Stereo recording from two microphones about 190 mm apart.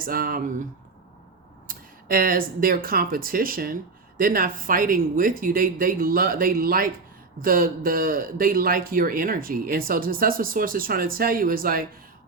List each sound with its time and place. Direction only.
0.0 s speech: 50° right (ahead or behind)
1.6 s speech: 45° right (ahead or behind)